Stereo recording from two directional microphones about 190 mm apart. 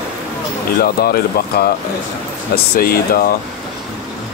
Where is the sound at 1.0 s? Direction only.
55° left (ahead or behind).